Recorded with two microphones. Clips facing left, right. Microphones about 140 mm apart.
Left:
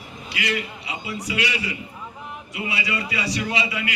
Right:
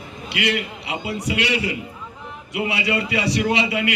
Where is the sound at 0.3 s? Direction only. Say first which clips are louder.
Right 4 dB; 60° right (ahead or behind).